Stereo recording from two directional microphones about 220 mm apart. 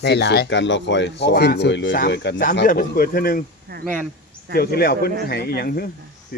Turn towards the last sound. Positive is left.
turn(degrees=40)  # may be behind; listen again after turning